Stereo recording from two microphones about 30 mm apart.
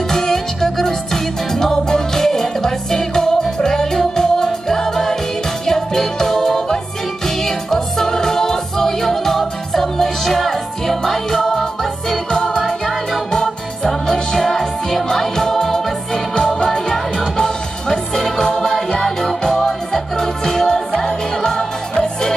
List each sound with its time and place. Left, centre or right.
0.1 s music: centre